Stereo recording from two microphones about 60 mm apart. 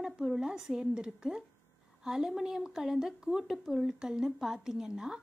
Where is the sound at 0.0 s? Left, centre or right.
Centre.